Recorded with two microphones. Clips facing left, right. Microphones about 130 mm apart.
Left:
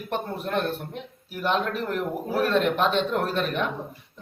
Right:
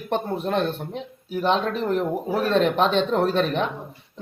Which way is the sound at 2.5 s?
30° right (ahead or behind).